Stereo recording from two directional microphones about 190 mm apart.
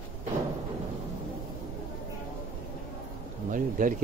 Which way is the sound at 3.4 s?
45° right (ahead or behind).